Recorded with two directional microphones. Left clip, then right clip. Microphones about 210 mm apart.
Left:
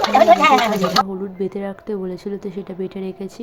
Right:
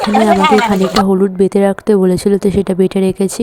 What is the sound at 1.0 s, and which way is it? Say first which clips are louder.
A woman's voice: right 13 dB; 45° right (ahead or behind).